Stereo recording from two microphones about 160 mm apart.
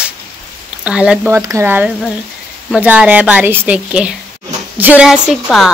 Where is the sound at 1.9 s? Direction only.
Centre (ahead or behind).